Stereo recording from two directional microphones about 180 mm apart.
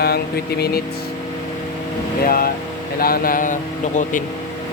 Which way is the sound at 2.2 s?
55° left (ahead or behind).